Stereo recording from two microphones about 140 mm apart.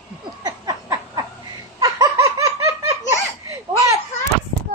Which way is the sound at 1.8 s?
25° right (ahead or behind).